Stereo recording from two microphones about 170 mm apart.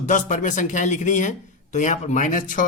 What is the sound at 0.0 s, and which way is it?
A man's voice, 45° left (ahead or behind).